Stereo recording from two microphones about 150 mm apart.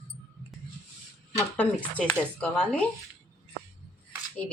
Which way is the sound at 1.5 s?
10° left (ahead or behind).